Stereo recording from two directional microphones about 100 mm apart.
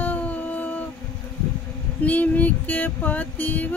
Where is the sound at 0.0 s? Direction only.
15° left (ahead or behind).